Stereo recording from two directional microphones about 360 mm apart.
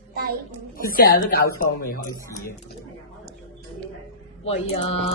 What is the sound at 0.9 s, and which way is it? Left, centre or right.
A woman's voice, left.